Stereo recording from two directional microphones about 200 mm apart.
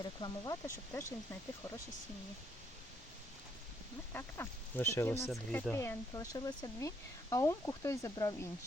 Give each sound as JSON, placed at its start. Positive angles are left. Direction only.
{"t": 0.0, "sound": "speech", "side_deg": 20}
{"t": 4.1, "sound": "speech", "side_deg": 10}